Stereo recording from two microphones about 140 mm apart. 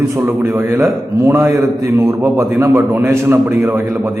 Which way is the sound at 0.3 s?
15° right (ahead or behind).